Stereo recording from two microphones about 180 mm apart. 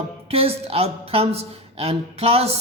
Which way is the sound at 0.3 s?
35° right (ahead or behind).